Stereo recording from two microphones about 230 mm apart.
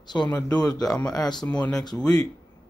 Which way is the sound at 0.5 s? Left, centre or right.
Centre.